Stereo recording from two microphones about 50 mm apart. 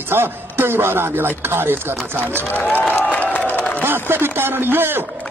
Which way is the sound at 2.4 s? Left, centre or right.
Left.